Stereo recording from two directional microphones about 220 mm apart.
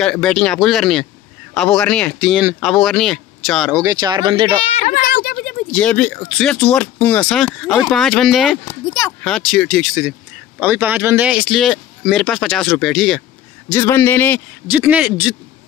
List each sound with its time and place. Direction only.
0.0 s speech: centre (ahead or behind)
3.7 s speech: 15° right (ahead or behind)
4.6 s a sound: 30° left (ahead or behind)
5.7 s speech: 5° left (ahead or behind)
10.6 s speech: 10° right (ahead or behind)
13.7 s a man's voice: 10° left (ahead or behind)
14.7 s a man's voice: 5° right (ahead or behind)